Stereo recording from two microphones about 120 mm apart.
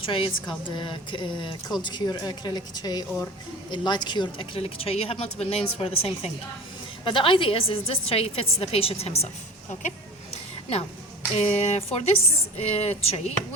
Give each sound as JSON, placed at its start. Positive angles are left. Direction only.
{"t": 0.0, "sound": "a woman's voice", "side_deg": 45}
{"t": 7.0, "sound": "a woman's voice", "side_deg": 45}
{"t": 11.3, "sound": "a woman's voice", "side_deg": 65}